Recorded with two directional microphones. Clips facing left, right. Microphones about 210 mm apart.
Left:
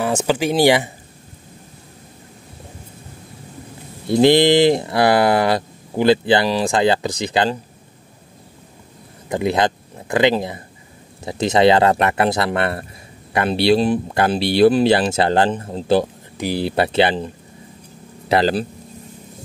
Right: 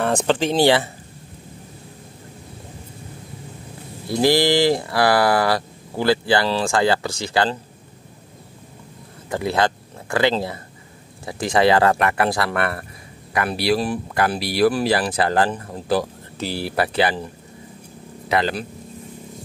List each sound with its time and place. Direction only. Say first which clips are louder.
0.0 s speech: left 1 dB; 5° left (ahead or behind)
4.1 s speech: left 5 dB; 20° left (ahead or behind)
9.3 s speech: left 2 dB; 20° left (ahead or behind)
18.3 s speech: left 5 dB; 35° left (ahead or behind)